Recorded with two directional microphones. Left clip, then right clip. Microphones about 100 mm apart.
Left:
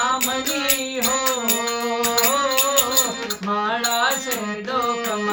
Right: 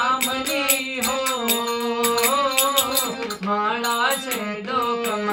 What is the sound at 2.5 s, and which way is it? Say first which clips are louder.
Music: left 1 dB; 20° right (ahead or behind).